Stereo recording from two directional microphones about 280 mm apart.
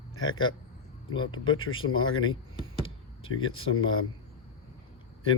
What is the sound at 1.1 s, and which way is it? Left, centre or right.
Speech, centre.